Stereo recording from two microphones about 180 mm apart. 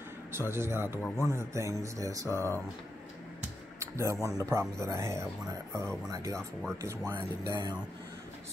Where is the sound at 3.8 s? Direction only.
15° right (ahead or behind).